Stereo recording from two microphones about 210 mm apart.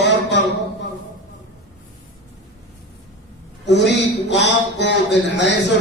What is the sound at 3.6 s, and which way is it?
A man's voice, 55° left (ahead or behind).